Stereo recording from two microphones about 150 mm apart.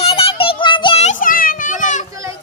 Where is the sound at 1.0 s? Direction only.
60° left (ahead or behind).